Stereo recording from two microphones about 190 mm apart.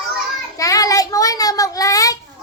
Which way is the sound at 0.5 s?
20° left (ahead or behind).